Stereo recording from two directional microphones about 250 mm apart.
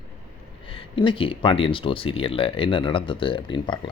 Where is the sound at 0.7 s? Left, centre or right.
Centre.